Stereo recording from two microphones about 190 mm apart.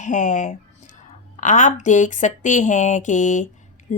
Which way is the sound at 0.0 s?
40° left (ahead or behind).